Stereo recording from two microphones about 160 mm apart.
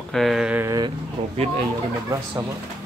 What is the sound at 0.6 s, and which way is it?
Speech, 25° right (ahead or behind).